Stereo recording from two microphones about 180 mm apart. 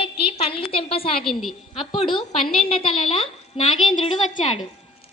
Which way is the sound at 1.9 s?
30° left (ahead or behind).